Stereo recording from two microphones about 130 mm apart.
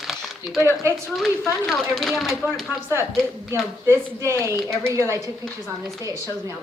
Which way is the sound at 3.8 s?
20° right (ahead or behind).